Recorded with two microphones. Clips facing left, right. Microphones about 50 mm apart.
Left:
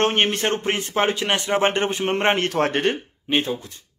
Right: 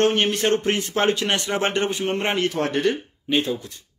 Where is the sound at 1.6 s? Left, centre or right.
Left.